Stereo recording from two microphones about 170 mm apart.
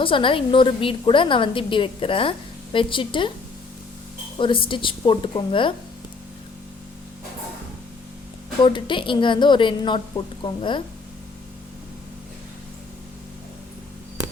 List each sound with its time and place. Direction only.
0.0 s a woman's voice: 30° left (ahead or behind)
4.4 s a woman's voice: 30° left (ahead or behind)
8.6 s a woman's voice: 30° left (ahead or behind)